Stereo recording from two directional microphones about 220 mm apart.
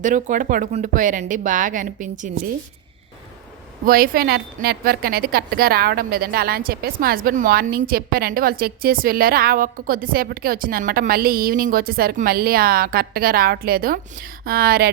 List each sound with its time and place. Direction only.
0.0 s speech: 35° right (ahead or behind)
3.8 s speech: 40° right (ahead or behind)